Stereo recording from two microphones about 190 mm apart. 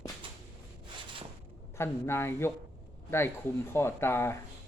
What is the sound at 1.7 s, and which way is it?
Speech, 15° left (ahead or behind).